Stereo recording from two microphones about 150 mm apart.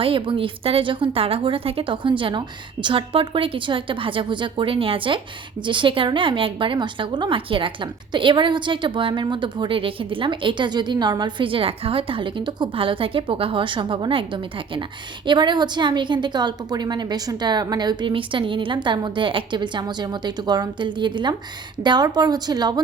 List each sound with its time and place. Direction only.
0.0 s a woman's voice: 35° right (ahead or behind)
15.3 s a woman's voice: 30° right (ahead or behind)